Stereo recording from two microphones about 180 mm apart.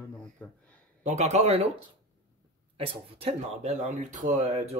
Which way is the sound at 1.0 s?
40° right (ahead or behind).